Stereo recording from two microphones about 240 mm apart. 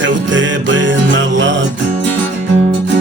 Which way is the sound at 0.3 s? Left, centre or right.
Right.